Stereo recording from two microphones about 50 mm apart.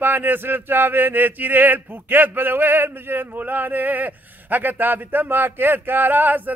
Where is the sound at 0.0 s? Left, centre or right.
Right.